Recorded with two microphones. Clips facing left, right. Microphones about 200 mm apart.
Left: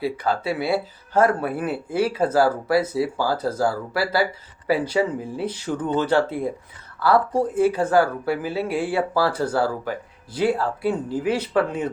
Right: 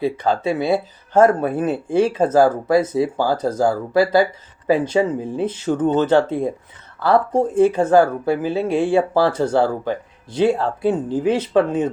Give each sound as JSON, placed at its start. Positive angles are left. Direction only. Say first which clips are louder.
{"t": 0.0, "sound": "speech", "louder": "right 4 dB", "side_deg": -25}